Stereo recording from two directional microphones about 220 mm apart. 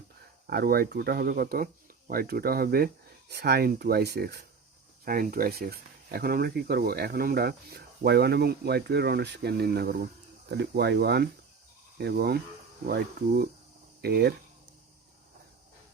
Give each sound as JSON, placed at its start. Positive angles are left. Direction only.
{"t": 0.4, "sound": "speech", "side_deg": -45}